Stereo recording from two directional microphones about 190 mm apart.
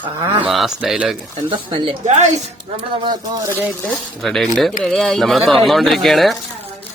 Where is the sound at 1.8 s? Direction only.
35° right (ahead or behind).